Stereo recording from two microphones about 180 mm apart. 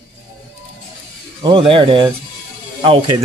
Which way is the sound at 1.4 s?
30° right (ahead or behind).